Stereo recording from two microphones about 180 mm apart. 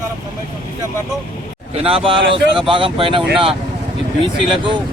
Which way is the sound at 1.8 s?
30° right (ahead or behind).